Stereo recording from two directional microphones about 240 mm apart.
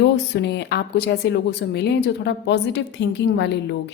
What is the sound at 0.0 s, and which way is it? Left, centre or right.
Speech, left.